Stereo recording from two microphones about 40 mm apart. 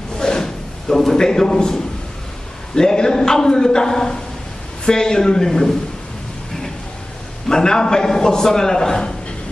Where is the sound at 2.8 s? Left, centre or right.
Centre.